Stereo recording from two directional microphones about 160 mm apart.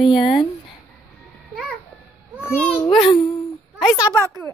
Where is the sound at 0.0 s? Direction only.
35° left (ahead or behind).